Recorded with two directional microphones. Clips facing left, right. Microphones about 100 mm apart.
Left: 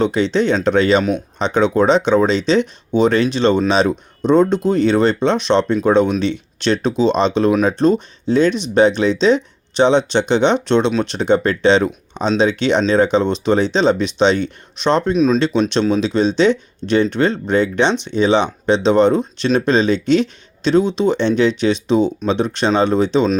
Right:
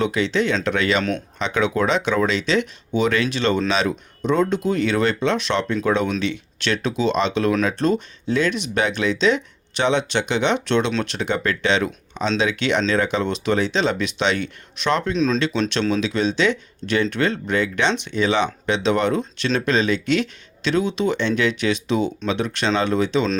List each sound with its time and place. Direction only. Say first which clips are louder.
0.0 s speech: left 5 dB; 30° left (ahead or behind)
15.1 s speech: left 6 dB; 10° left (ahead or behind)
16.0 s speech: left 5 dB; 30° left (ahead or behind)